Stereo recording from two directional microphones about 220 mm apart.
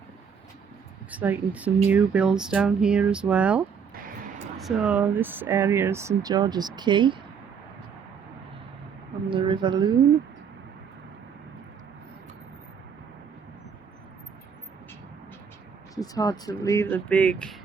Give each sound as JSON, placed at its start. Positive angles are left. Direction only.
{"t": 1.1, "sound": "speech", "side_deg": -5}
{"t": 9.3, "sound": "speech", "side_deg": -20}
{"t": 16.0, "sound": "speech", "side_deg": 15}